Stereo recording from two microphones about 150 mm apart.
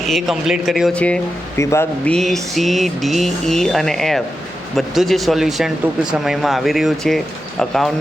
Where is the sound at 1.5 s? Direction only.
20° left (ahead or behind).